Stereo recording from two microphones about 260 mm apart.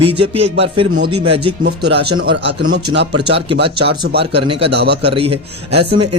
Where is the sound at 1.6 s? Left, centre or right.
Right.